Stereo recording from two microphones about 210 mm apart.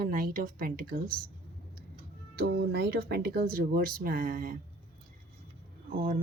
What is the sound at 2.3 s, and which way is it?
Speech, 50° right (ahead or behind).